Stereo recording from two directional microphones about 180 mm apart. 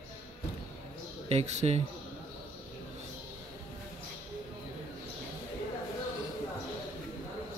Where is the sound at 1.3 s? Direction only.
40° right (ahead or behind).